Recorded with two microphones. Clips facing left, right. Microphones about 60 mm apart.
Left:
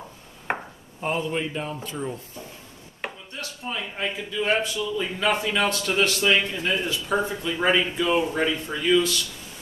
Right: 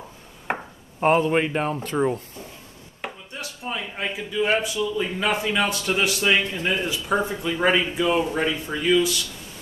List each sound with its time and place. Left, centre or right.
0.5 s chop: centre
1.0 s speech: right
3.3 s a man's voice: centre